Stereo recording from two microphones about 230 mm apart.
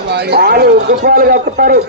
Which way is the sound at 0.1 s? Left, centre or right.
Right.